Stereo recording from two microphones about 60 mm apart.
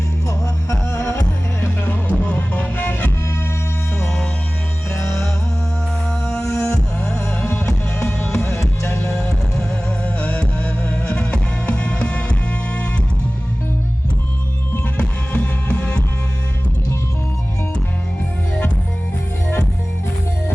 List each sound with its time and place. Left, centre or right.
0.3 s music: left
1.8 s music: left
6.1 s music: centre
6.4 s music: left
7.5 s music: centre
8.4 s music: left
9.2 s music: centre
14.9 s music: centre